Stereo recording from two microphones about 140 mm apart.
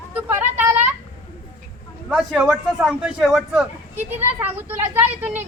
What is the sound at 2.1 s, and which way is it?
Speech, 10° right (ahead or behind).